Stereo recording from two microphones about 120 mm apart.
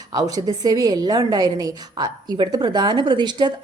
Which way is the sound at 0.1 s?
30° right (ahead or behind).